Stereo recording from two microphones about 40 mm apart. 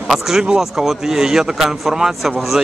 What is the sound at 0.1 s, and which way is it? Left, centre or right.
Speech, centre.